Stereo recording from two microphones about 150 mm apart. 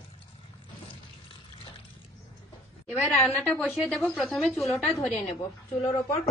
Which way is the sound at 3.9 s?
5° left (ahead or behind).